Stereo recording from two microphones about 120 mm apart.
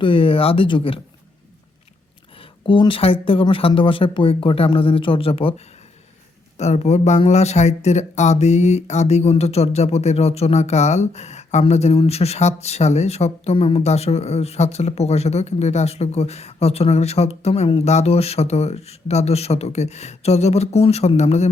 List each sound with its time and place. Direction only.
0.0 s speech: 50° left (ahead or behind)
2.3 s speech: 45° left (ahead or behind)
6.6 s speech: 70° left (ahead or behind)